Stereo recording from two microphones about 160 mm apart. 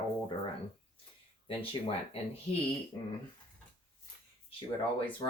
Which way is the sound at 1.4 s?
35° left (ahead or behind).